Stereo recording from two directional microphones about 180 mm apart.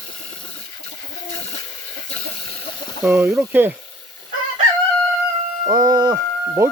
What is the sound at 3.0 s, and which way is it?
Speech, 10° right (ahead or behind).